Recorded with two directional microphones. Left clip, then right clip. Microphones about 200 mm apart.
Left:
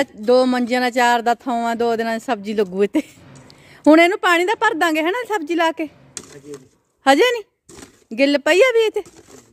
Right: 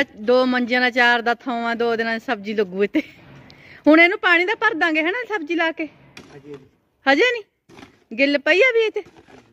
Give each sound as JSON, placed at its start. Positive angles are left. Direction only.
{"t": 0.0, "sound": "speech", "side_deg": 15}
{"t": 7.0, "sound": "speech", "side_deg": 25}